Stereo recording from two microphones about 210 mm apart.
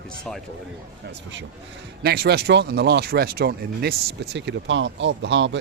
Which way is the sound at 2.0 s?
50° right (ahead or behind).